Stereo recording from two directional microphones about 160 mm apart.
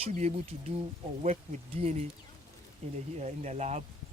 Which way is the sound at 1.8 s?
40° right (ahead or behind).